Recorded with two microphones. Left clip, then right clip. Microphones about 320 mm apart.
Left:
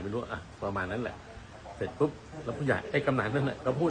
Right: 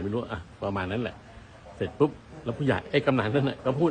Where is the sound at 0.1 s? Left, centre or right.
Right.